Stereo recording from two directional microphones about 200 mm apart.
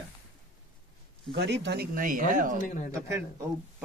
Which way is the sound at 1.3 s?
60° right (ahead or behind).